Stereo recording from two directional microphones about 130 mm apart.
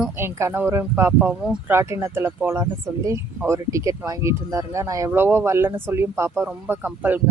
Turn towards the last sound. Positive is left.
turn(degrees=-15)  # may be behind; listen again after turning